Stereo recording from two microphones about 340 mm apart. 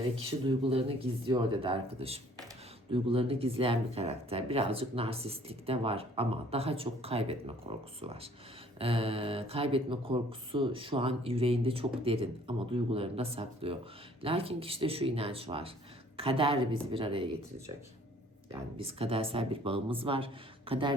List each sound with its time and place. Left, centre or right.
0.2 s speech: centre
18.8 s speech: centre